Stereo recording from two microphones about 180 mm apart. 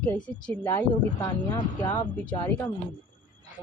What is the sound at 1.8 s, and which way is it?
Speech, 10° left (ahead or behind).